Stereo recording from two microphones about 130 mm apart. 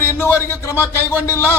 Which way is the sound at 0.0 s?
20° left (ahead or behind).